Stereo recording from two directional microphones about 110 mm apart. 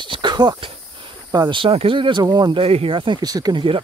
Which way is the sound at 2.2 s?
35° right (ahead or behind).